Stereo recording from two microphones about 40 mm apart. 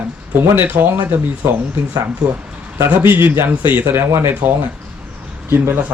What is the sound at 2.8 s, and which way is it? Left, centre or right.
Speech, right.